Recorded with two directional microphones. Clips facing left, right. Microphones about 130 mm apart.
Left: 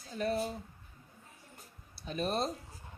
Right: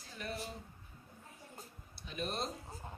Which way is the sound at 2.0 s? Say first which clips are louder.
Left 6 dB; 40° left (ahead or behind).